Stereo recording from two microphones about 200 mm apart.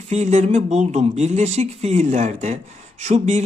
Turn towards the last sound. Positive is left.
turn(degrees=-35)  # may be behind; listen again after turning